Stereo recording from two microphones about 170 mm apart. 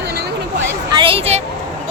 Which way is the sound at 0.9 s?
30° right (ahead or behind).